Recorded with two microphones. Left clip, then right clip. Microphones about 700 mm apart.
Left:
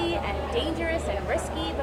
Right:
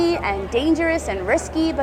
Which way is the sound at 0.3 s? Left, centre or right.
Right.